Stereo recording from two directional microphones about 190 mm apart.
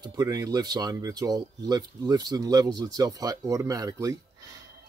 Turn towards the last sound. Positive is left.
turn(degrees=-20)  # may be behind; listen again after turning